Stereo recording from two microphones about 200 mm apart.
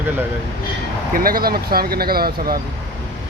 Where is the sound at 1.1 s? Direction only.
45° right (ahead or behind).